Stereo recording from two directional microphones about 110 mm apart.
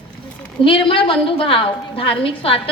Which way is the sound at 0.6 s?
50° left (ahead or behind).